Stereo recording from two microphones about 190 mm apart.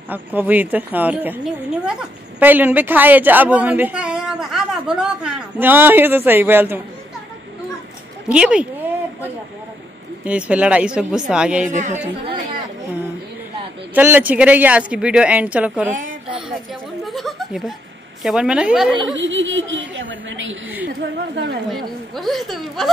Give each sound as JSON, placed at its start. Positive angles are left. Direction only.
{"t": 0.1, "sound": "a woman's voice", "side_deg": -10}
{"t": 8.3, "sound": "a woman's voice", "side_deg": -5}
{"t": 10.2, "sound": "a woman's voice", "side_deg": -5}
{"t": 11.7, "sound": "a woman's voice", "side_deg": -40}
{"t": 13.9, "sound": "a woman's voice", "side_deg": -10}
{"t": 17.0, "sound": "a sound", "side_deg": 0}
{"t": 18.2, "sound": "a woman's voice", "side_deg": -5}
{"t": 19.1, "sound": "chuckle", "side_deg": -80}
{"t": 21.6, "sound": "a woman's voice", "side_deg": 0}